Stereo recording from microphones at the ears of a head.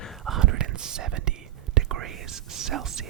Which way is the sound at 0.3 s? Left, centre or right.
Right.